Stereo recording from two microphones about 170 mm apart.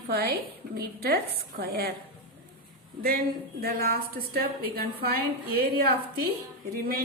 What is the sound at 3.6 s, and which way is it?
A woman's voice, 60° right (ahead or behind).